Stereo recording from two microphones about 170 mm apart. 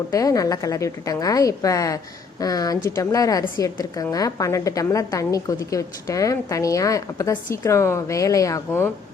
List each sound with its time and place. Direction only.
0.1 s a woman's voice: 20° left (ahead or behind)